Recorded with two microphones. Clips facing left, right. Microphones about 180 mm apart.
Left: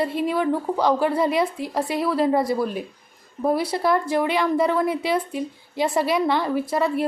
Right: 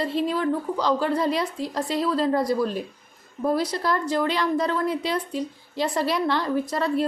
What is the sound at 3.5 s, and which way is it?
Speech, 60° left (ahead or behind).